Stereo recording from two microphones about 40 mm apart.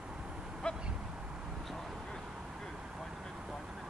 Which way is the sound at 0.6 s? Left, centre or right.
Left.